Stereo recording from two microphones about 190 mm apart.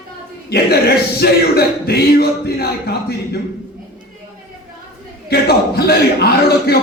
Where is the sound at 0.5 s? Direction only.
55° left (ahead or behind).